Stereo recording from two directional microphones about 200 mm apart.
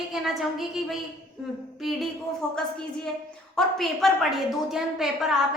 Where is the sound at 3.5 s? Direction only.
Centre (ahead or behind).